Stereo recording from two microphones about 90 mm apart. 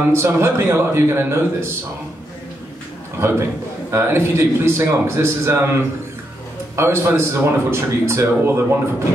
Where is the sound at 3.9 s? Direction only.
30° right (ahead or behind).